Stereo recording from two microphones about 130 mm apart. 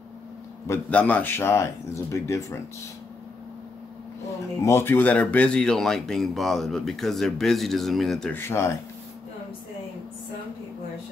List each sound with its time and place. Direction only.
0.7 s a man's voice: 10° left (ahead or behind)
4.6 s speech: 20° left (ahead or behind); by 8.3 s centre (ahead or behind)
8.3 s speech: 20° left (ahead or behind)